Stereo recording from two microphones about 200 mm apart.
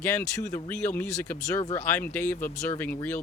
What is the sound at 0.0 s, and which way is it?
Speech, 10° left (ahead or behind).